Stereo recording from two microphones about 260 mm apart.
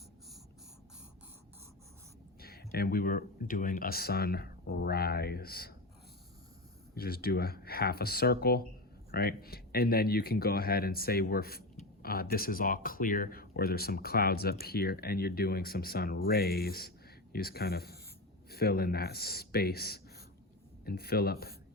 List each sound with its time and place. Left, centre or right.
2.4 s speech: left
6.9 s speech: left